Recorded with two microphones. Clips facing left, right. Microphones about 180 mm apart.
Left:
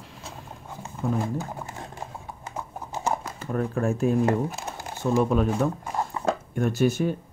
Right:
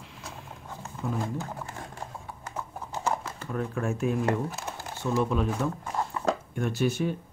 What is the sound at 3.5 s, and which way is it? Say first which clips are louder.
Speech: left 5 dB; 35° left (ahead or behind).